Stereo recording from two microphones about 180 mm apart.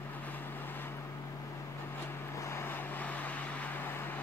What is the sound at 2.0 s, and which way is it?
Vehicle, 15° left (ahead or behind).